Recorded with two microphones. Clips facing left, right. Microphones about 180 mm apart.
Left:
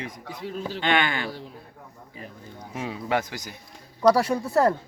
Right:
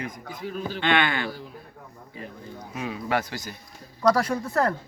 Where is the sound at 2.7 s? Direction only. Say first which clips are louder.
Left 1 dB; 25° left (ahead or behind); by 4.7 s 5° left (ahead or behind).